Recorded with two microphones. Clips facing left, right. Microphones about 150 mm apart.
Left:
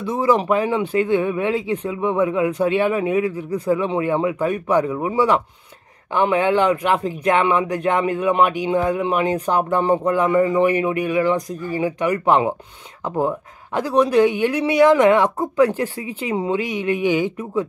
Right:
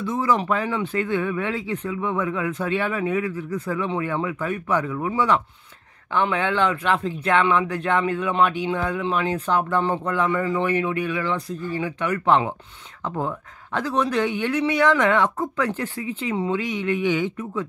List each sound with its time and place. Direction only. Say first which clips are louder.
0.0 s speech: left 4 dB; 15° left (ahead or behind)